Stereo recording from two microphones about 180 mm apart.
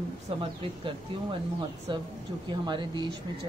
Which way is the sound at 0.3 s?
30° right (ahead or behind).